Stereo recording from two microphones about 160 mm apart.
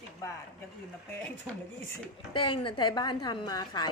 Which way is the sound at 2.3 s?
30° left (ahead or behind).